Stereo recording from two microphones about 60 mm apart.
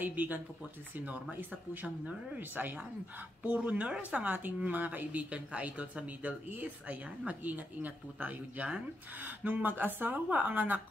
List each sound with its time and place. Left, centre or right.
0.0 s speech: right